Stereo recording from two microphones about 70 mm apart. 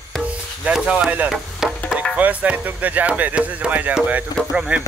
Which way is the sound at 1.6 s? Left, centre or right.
Centre.